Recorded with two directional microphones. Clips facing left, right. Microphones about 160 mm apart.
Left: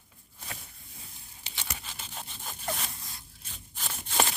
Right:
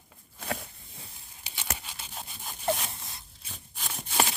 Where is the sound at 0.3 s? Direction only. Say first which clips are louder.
Right 11 dB; 90° right.